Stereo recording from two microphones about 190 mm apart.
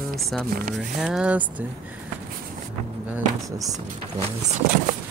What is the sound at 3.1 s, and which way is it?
Speech, 15° right (ahead or behind).